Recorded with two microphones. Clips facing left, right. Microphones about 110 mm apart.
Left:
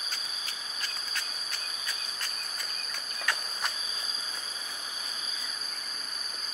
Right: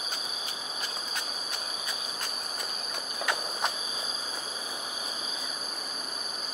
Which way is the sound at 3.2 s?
15° right (ahead or behind).